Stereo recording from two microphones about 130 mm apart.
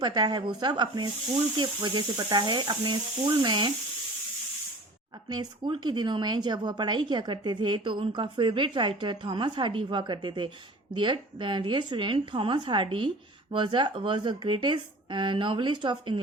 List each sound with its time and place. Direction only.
0.0 s speech: 35° right (ahead or behind)
5.3 s speech: 35° right (ahead or behind)